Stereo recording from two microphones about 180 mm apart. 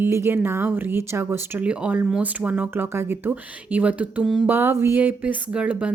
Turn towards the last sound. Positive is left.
turn(degrees=-5)  # may be behind; listen again after turning